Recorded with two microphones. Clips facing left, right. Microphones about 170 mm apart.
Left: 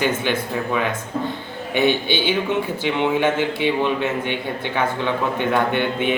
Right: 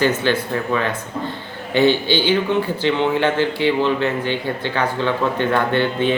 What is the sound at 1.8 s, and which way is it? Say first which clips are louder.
A man's voice: right 3 dB; 15° left (ahead or behind).